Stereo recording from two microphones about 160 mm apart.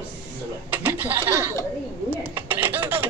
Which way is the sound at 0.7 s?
10° right (ahead or behind).